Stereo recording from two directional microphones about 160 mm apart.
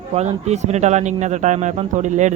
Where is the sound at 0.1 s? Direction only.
45° right (ahead or behind).